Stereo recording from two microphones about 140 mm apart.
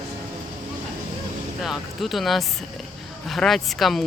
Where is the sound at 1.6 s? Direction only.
Centre (ahead or behind).